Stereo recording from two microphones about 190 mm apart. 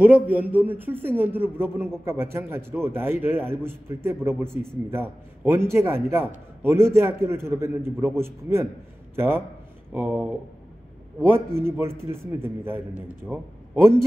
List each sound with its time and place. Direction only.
0.0 s a man's voice: 10° right (ahead or behind)
11.3 s a man's voice: 10° right (ahead or behind)